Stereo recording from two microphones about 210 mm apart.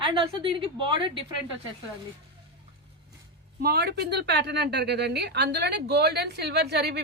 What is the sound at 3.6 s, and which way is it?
A woman's voice, 50° right (ahead or behind).